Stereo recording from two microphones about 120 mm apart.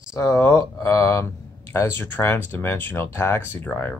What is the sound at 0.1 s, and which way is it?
Speech, 25° left (ahead or behind).